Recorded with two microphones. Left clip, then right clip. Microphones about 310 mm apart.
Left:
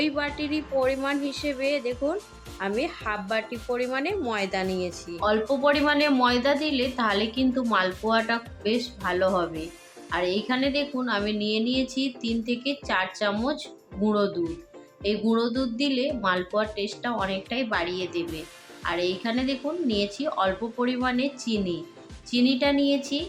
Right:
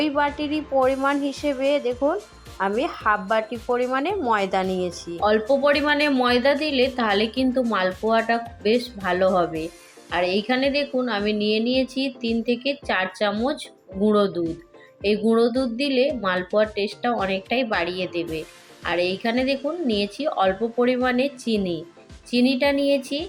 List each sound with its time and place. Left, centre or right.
0.0 s a woman's voice: centre